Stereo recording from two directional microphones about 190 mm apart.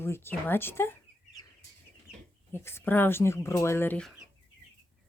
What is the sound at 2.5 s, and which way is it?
Speech, 10° left (ahead or behind).